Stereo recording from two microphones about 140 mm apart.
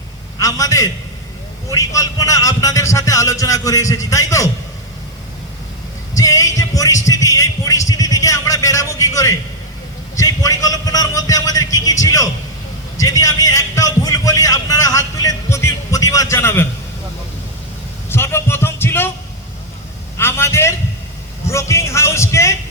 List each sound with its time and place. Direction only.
0.3 s a man's voice: 25° left (ahead or behind)
6.1 s a man's voice: 25° left (ahead or behind)
18.1 s a sound: 15° left (ahead or behind)
20.1 s speech: 20° left (ahead or behind)